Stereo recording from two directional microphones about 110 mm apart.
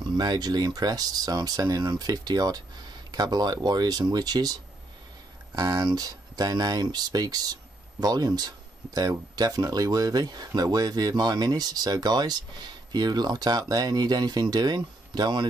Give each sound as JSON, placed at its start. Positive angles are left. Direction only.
{"t": 0.2, "sound": "speech", "side_deg": -40}